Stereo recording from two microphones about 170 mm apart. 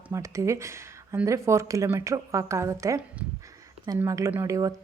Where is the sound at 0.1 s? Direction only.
20° right (ahead or behind).